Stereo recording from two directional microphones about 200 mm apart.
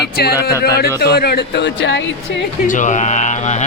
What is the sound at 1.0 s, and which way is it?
A woman's voice, 50° left (ahead or behind).